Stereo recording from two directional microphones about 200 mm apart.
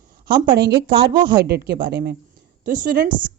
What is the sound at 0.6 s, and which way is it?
Speech, 55° right (ahead or behind).